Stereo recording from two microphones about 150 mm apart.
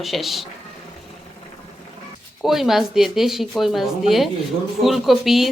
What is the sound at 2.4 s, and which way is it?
Speech, centre (ahead or behind).